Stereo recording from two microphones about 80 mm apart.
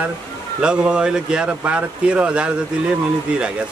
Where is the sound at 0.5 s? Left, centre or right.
Centre.